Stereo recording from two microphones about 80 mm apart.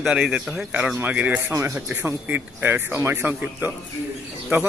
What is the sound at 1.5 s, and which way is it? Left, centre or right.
Speech, right.